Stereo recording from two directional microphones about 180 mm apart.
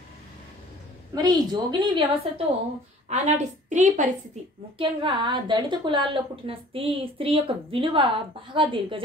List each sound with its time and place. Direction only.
1.1 s a woman's voice: 25° right (ahead or behind)
3.1 s a woman's voice: 40° right (ahead or behind)
4.7 s a woman's voice: 25° right (ahead or behind)